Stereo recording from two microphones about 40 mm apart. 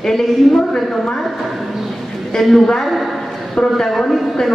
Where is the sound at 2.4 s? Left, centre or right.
Centre.